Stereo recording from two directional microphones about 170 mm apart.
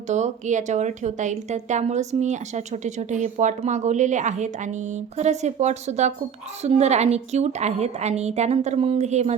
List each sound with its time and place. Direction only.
0.1 s a woman's voice: 45° right (ahead or behind)